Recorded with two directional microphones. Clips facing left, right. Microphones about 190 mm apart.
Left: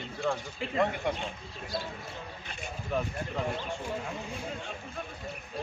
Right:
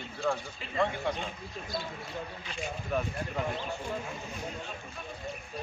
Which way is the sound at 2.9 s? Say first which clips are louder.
Even; 5° right (ahead or behind).